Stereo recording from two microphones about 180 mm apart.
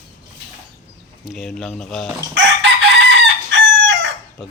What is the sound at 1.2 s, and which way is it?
Speech, centre (ahead or behind).